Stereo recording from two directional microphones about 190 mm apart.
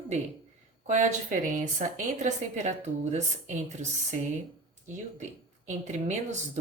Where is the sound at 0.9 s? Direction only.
40° right (ahead or behind).